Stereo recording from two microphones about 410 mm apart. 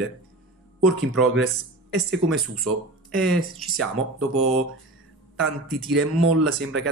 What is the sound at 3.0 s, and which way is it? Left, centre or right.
Speech, centre.